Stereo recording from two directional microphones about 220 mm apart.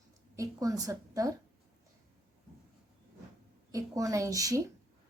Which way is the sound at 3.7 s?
15° right (ahead or behind).